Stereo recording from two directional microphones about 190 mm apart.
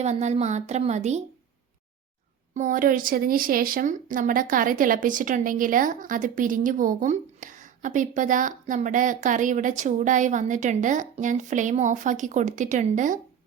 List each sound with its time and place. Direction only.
0.0 s a woman's voice: 35° right (ahead or behind)
2.6 s speech: 45° right (ahead or behind)